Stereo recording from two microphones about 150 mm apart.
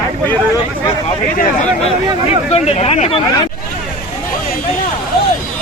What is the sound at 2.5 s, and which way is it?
Speech, 45° left (ahead or behind).